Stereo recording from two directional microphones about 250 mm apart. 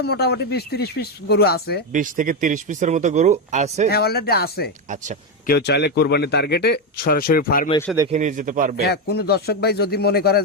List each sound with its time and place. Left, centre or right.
0.0 s speech: left
1.9 s speech: right
3.8 s speech: left
8.1 s a man's voice: right
8.8 s speech: left